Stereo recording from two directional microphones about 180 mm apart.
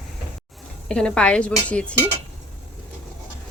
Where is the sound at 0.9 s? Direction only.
5° left (ahead or behind).